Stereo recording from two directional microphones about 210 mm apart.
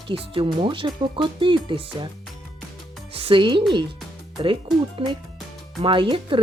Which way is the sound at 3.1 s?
25° right (ahead or behind).